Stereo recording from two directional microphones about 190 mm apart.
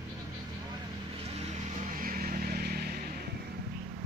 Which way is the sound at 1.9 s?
45° right (ahead or behind).